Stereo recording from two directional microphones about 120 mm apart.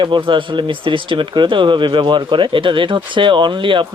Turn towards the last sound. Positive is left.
turn(degrees=-45)  # may be behind; listen again after turning